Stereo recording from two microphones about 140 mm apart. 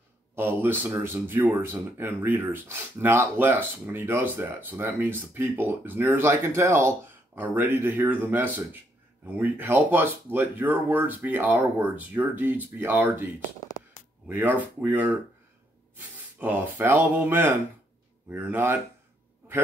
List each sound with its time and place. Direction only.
0.4 s speech: 15° right (ahead or behind)